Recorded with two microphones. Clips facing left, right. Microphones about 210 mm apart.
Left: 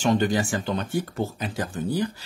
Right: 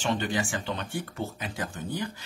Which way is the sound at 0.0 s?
40° left (ahead or behind).